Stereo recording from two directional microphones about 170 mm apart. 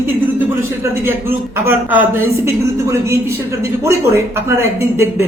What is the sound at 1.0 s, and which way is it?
Speech, 15° right (ahead or behind).